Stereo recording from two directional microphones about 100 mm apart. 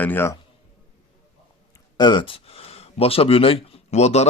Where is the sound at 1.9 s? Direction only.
50° left (ahead or behind); by 4.2 s 90° left.